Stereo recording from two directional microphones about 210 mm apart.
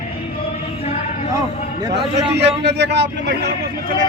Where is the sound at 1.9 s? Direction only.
55° right (ahead or behind).